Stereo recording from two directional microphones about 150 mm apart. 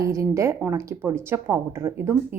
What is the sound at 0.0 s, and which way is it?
Speech, 20° right (ahead or behind).